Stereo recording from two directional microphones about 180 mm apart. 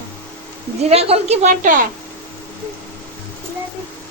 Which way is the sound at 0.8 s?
35° right (ahead or behind).